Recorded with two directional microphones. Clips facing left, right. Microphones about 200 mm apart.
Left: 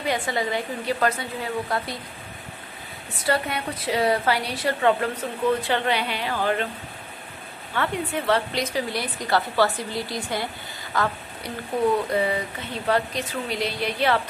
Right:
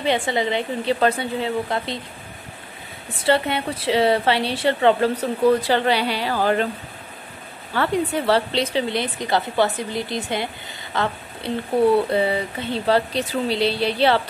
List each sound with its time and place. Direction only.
0.0 s a woman's voice: 25° right (ahead or behind)
3.3 s a woman's voice: 25° right (ahead or behind)
7.7 s a woman's voice: 35° right (ahead or behind)